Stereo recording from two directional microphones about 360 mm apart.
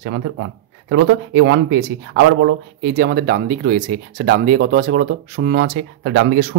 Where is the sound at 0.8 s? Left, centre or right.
Right.